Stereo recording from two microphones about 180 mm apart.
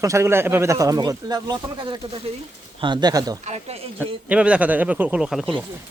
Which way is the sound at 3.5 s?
35° right (ahead or behind).